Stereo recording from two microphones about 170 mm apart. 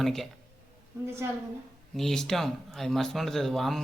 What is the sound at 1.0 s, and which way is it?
Speech, 15° right (ahead or behind).